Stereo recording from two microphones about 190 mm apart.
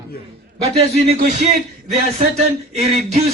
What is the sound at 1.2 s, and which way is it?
Speech, 40° right (ahead or behind).